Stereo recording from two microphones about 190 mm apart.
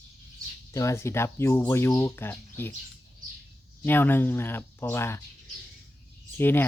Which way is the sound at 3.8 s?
10° left (ahead or behind).